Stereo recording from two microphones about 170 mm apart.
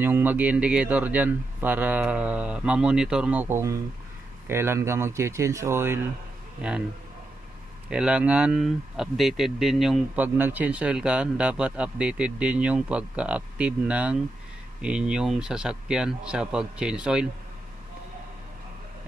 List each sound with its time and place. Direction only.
0.0 s speech: 10° right (ahead or behind)
7.9 s speech: 5° right (ahead or behind)